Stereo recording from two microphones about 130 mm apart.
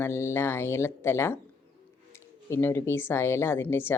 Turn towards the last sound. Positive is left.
turn(degrees=15)  # may be behind; listen again after turning